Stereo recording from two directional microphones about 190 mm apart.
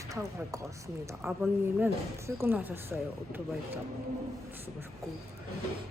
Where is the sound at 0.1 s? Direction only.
15° right (ahead or behind).